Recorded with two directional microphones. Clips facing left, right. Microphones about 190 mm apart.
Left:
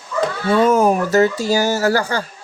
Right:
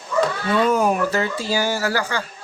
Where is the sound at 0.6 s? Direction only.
45° left (ahead or behind).